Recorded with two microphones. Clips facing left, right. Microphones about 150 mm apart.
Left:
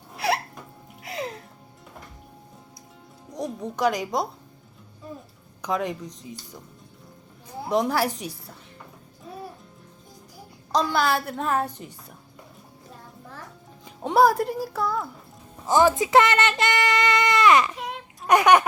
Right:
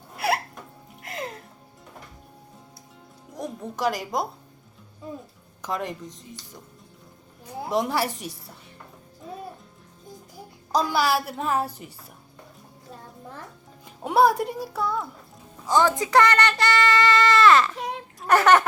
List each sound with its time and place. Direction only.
0.2 s hiccup: 5° right (ahead or behind)
1.0 s music: centre (ahead or behind)
3.3 s a woman's voice: centre (ahead or behind)
5.6 s a woman's voice: centre (ahead or behind)
7.7 s a woman's voice: centre (ahead or behind)
10.7 s a woman's voice: 10° right (ahead or behind)
13.8 s a woman's voice: 5° right (ahead or behind)
15.6 s speech: 15° left (ahead or behind)
18.3 s a sound: 15° left (ahead or behind)